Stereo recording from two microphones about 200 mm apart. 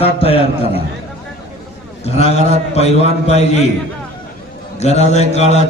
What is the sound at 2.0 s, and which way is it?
Speech, 30° left (ahead or behind).